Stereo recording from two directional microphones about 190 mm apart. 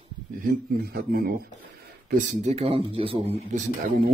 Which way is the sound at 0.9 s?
50° right (ahead or behind).